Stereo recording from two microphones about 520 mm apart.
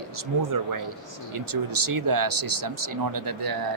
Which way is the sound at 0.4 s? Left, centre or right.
Right.